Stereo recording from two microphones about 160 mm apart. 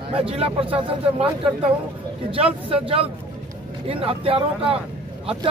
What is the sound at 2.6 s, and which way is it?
Speech, 35° right (ahead or behind).